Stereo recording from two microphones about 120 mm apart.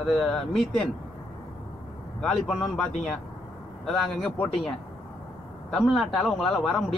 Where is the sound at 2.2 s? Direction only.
5° left (ahead or behind).